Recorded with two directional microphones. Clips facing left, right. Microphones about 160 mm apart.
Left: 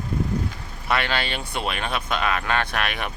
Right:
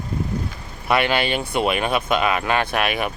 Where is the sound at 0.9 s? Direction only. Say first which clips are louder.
Right 5 dB; 15° right (ahead or behind).